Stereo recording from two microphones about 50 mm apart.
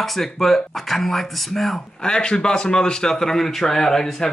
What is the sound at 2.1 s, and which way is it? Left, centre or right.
A man's voice, centre.